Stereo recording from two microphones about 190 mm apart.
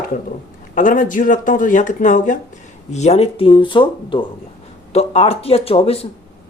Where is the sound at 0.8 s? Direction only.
45° left (ahead or behind).